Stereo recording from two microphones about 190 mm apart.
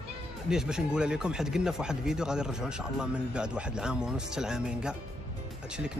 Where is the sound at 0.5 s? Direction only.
5° right (ahead or behind).